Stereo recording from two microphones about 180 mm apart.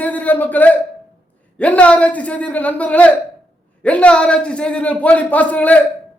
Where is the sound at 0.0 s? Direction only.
10° left (ahead or behind).